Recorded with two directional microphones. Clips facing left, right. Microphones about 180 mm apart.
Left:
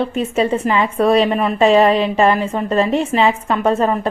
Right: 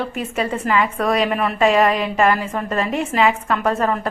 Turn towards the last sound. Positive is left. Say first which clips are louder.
# left 3 dB
turn(degrees=25)  # may be behind; listen again after turning